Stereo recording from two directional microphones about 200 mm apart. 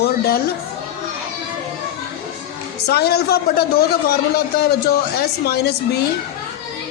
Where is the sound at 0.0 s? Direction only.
50° left (ahead or behind).